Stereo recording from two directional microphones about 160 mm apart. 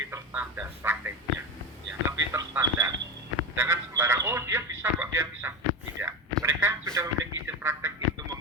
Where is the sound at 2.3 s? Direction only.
15° right (ahead or behind).